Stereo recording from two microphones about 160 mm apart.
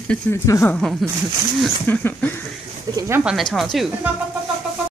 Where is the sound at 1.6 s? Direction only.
10° left (ahead or behind).